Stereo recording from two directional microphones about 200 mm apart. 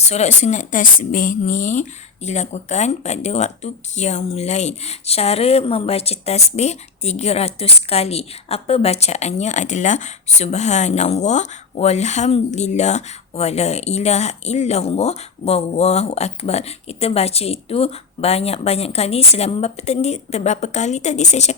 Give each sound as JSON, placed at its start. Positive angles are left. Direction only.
{"t": 0.0, "sound": "speech", "side_deg": 35}